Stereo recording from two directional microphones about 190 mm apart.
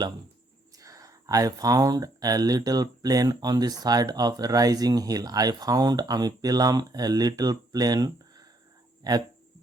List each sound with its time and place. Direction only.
0.8 s speech: 15° right (ahead or behind)